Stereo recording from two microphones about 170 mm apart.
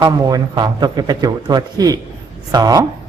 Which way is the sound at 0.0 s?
25° right (ahead or behind).